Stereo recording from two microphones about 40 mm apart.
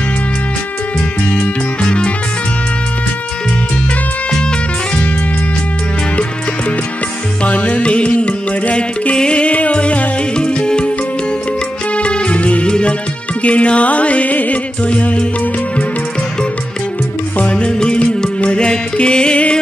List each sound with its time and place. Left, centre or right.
1.8 s music: left
7.4 s music: left
11.9 s music: left
12.6 s music: left
13.4 s music: left
17.4 s music: left